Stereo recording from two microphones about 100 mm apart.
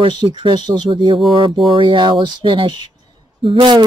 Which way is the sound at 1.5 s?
Centre (ahead or behind).